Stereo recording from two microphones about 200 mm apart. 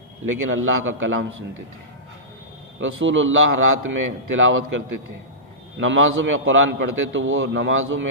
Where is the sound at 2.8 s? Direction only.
70° right (ahead or behind).